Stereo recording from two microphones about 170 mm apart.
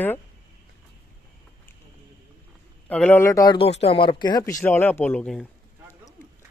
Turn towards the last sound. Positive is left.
turn(degrees=5)  # may be behind; listen again after turning